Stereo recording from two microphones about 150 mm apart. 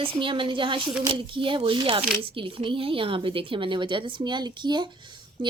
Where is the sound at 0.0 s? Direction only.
35° right (ahead or behind).